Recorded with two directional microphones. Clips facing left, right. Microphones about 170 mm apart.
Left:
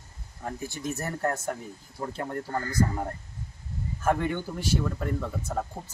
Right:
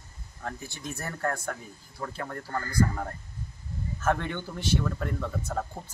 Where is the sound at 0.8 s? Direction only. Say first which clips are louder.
Left 2 dB; 20° left (ahead or behind).